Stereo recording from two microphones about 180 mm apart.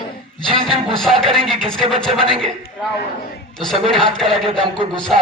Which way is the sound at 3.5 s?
Centre (ahead or behind).